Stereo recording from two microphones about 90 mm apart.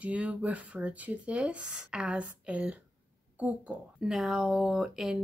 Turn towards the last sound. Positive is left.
turn(degrees=-5)  # may be behind; listen again after turning